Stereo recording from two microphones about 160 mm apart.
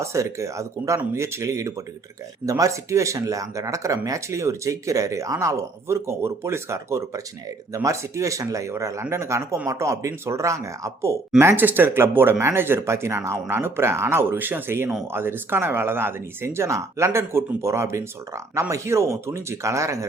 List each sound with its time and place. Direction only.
0.0 s speech: 20° right (ahead or behind)